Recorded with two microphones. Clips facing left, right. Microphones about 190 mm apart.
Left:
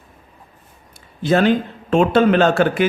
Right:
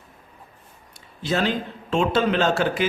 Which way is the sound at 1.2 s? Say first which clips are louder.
Left 8 dB; 55° left (ahead or behind).